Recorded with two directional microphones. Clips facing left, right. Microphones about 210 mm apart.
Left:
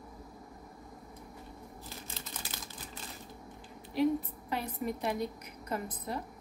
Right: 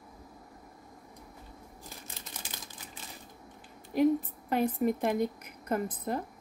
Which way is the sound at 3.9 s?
50° right (ahead or behind).